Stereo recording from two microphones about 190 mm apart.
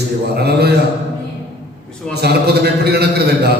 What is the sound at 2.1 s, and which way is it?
A man's voice, 60° right (ahead or behind).